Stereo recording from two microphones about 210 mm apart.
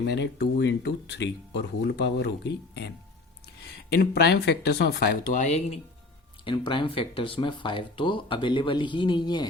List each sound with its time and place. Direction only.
0.1 s speech: 55° left (ahead or behind)
4.0 s speech: 50° left (ahead or behind); by 9.5 s 20° left (ahead or behind)